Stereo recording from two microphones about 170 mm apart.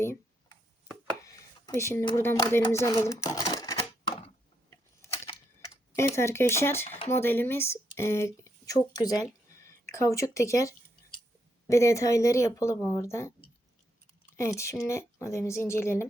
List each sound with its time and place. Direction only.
0.0 s a sound: 15° left (ahead or behind)
2.0 s speech: 15° left (ahead or behind)
5.0 s a sound: 20° left (ahead or behind)
6.8 s speech: 40° left (ahead or behind)
7.1 s speech: 15° left (ahead or behind)
14.3 s speech: 15° left (ahead or behind)